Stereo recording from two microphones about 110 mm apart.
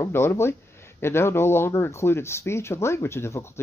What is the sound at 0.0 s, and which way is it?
Speech, 25° left (ahead or behind).